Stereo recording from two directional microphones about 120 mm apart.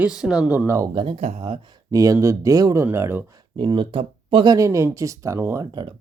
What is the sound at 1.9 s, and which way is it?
Speech, 30° right (ahead or behind).